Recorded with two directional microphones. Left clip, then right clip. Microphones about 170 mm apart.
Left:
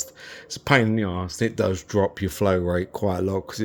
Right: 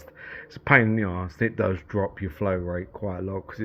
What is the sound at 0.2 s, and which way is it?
Speech, 35° left (ahead or behind).